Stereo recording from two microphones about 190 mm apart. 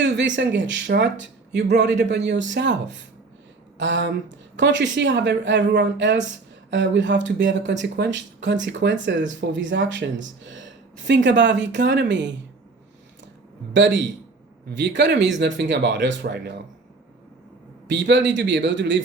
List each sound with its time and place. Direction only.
0.0 s a man's voice: 70° right (ahead or behind)
13.7 s speech: 75° right (ahead or behind)
17.8 s speech: 70° right (ahead or behind)